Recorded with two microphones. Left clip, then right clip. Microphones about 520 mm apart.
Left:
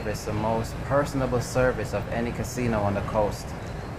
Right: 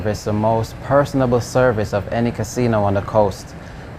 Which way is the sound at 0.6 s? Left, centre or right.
Right.